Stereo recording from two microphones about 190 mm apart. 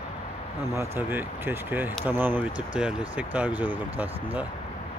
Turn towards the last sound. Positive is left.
turn(degrees=-10)  # may be behind; listen again after turning